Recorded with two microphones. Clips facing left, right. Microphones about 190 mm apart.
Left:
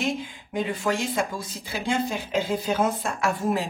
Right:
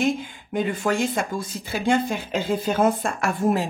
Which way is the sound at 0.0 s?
50° right (ahead or behind).